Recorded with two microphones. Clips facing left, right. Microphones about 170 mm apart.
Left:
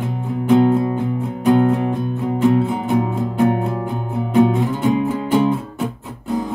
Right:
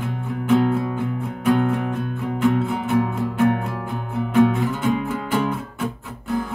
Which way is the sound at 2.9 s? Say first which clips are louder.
Even; 15° left (ahead or behind).